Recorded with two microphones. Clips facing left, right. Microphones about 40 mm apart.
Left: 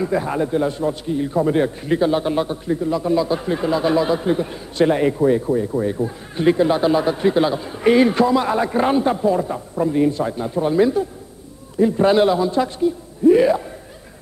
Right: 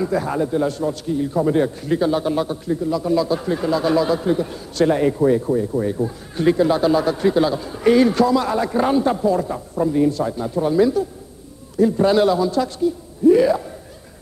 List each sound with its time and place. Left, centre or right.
0.0 s a man's voice: centre